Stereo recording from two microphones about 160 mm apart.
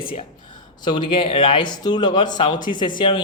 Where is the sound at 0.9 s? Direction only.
30° left (ahead or behind).